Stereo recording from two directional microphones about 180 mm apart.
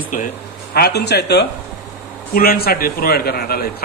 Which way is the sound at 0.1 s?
45° left (ahead or behind).